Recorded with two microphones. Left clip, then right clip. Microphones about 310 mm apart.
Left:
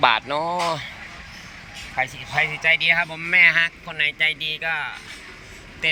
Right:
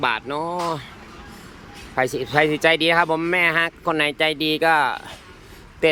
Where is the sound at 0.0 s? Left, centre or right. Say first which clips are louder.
Left 4 dB; centre.